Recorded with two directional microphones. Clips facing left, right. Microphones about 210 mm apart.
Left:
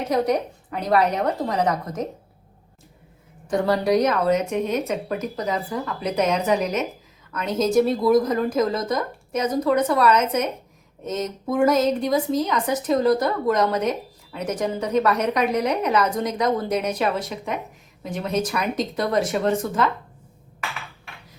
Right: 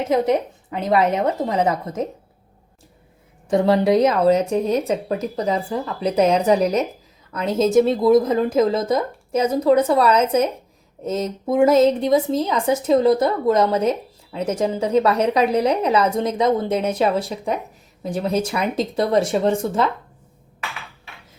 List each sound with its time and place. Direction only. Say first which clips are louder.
0.0 s a woman's voice: right 3 dB; 25° right (ahead or behind)
3.5 s a woman's voice: right 4 dB; 25° right (ahead or behind)